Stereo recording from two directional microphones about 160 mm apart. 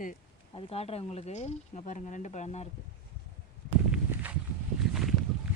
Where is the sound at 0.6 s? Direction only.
40° left (ahead or behind).